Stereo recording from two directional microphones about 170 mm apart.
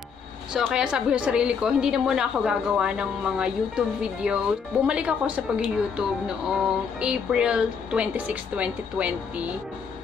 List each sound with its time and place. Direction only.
0.5 s a woman's voice: 5° right (ahead or behind)